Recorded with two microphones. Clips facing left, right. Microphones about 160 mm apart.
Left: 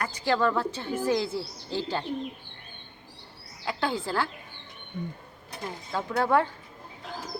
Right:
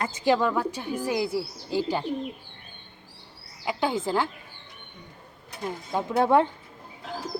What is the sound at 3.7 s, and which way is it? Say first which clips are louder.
Speech: right 3 dB; 15° right (ahead or behind).